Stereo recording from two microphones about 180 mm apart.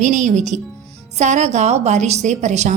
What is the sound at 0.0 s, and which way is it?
A woman's voice, 45° right (ahead or behind).